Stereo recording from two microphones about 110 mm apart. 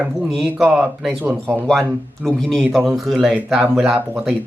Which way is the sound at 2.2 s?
5° left (ahead or behind).